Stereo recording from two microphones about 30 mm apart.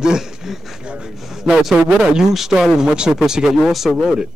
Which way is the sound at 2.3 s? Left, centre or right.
Centre.